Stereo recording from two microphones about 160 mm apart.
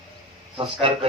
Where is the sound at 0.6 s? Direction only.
35° right (ahead or behind).